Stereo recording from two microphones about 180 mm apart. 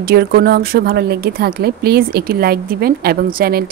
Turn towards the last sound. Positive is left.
turn(degrees=-55)  # may be behind; listen again after turning